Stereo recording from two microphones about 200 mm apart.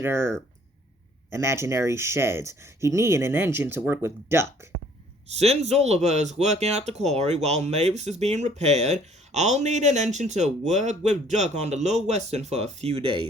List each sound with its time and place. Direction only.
0.0 s speech: 10° right (ahead or behind)
5.4 s speech: 30° right (ahead or behind)